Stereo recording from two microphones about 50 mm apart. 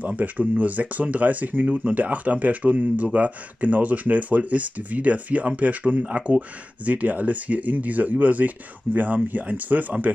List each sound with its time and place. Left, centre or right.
0.0 s speech: right